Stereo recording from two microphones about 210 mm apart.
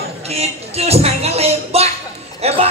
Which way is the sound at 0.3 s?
30° right (ahead or behind).